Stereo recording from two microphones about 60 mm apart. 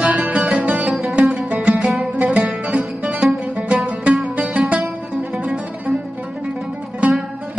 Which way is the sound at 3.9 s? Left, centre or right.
Centre.